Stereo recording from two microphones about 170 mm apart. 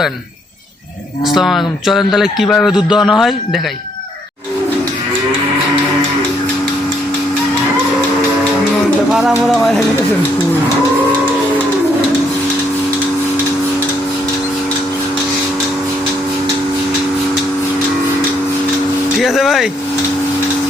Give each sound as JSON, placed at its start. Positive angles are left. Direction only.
{"t": 1.2, "sound": "a man's voice", "side_deg": 0}
{"t": 9.5, "sound": "a man's voice", "side_deg": 0}
{"t": 19.2, "sound": "a man's voice", "side_deg": 0}